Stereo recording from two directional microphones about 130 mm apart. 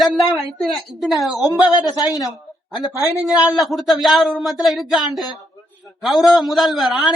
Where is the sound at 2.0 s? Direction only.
30° left (ahead or behind).